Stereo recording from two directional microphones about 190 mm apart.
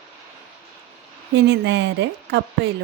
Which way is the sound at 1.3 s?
65° right (ahead or behind).